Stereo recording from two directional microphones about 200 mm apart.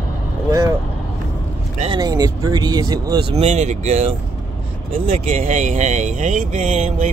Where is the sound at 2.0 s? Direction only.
20° right (ahead or behind).